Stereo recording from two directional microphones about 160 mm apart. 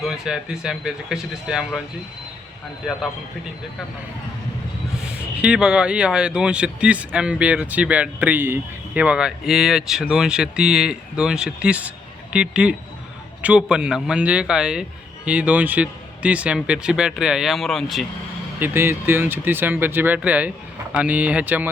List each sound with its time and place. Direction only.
0.0 s speech: 5° right (ahead or behind)
5.4 s speech: 5° right (ahead or behind)
18.6 s speech: 15° right (ahead or behind)